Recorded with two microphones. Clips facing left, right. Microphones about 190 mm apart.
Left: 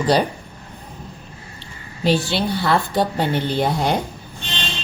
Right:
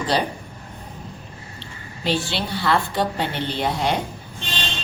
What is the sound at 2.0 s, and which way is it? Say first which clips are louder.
A woman's voice: left 5 dB; 45° left (ahead or behind).